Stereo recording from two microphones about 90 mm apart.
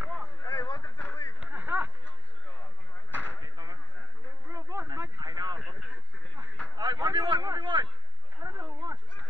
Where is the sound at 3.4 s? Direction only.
50° right (ahead or behind).